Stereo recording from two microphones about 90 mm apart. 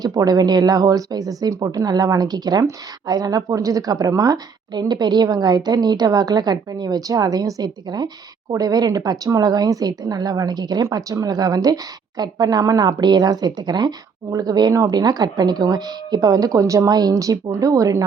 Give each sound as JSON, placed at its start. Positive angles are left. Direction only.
{"t": 0.0, "sound": "a woman's voice", "side_deg": -45}